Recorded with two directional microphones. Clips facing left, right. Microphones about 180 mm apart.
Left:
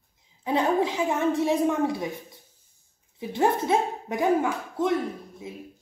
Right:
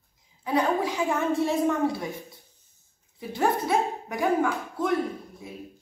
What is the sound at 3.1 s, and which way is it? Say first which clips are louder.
Speech: left 2 dB; 20° left (ahead or behind).